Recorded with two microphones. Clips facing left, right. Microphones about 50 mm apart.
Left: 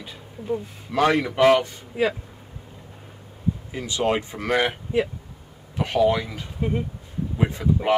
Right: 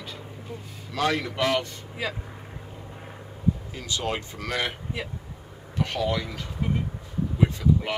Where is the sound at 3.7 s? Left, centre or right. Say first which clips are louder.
Left 6 dB; left.